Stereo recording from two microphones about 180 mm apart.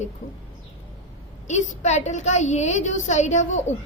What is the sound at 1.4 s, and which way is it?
A woman's voice, 40° left (ahead or behind).